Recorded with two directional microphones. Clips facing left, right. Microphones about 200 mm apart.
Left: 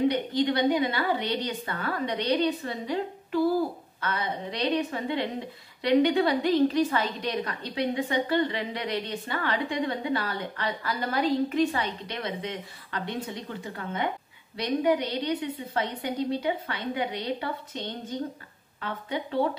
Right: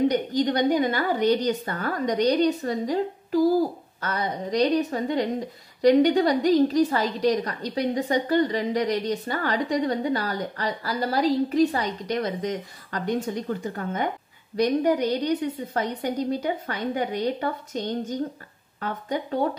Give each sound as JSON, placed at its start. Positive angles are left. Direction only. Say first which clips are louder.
{"t": 0.1, "sound": "a woman's voice", "louder": "right 3 dB", "side_deg": -40}